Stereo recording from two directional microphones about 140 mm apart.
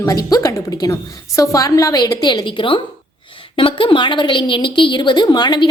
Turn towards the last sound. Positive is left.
turn(degrees=30)  # may be behind; listen again after turning